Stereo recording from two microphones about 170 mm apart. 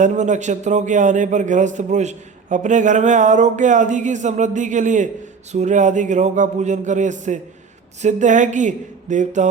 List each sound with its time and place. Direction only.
0.0 s a man's voice: 45° right (ahead or behind)